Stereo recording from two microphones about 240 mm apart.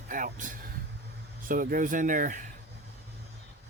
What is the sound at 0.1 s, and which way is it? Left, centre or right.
Speech, right.